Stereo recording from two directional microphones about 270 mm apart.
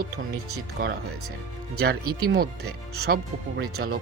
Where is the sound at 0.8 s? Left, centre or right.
Right.